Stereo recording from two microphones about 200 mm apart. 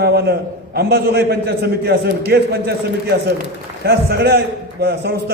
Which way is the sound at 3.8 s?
50° right (ahead or behind).